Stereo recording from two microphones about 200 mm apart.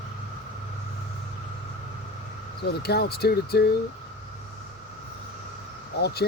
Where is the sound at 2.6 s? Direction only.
55° left (ahead or behind).